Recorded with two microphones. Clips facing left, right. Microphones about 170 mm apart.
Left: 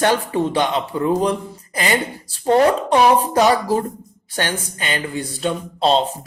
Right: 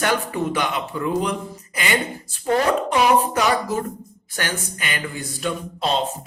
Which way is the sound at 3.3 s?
30° left (ahead or behind).